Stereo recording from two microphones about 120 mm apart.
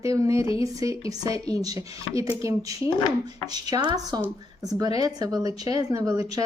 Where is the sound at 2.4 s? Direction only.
25° right (ahead or behind).